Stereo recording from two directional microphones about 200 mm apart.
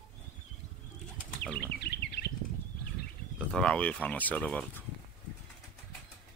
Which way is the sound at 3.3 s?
5° left (ahead or behind).